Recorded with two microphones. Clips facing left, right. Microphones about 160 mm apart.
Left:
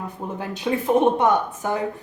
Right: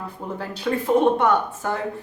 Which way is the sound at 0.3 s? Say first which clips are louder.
Even; 20° left (ahead or behind).